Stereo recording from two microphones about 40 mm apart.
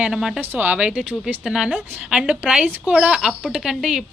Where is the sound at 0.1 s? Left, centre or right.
Centre.